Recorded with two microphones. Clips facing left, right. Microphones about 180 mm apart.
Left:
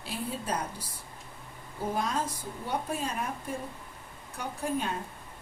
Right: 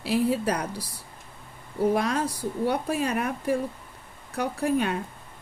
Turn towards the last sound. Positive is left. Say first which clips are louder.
# right 7 dB
turn(degrees=-75)  # may be behind; listen again after turning